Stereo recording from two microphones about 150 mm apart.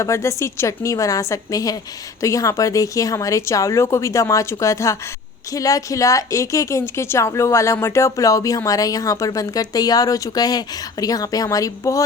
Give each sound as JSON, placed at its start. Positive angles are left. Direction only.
{"t": 0.0, "sound": "a woman's voice", "side_deg": 20}